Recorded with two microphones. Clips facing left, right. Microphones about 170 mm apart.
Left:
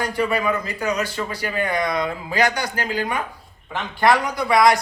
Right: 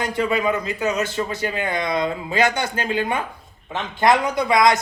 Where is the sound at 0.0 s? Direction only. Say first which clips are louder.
Right 1 dB; 20° right (ahead or behind).